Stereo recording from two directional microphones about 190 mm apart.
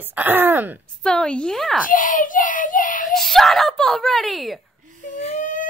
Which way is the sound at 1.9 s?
45° left (ahead or behind).